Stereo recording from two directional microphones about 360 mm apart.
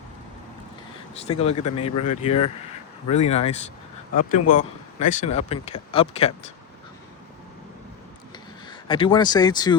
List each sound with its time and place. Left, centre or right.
1.3 s speech: centre
8.6 s speech: centre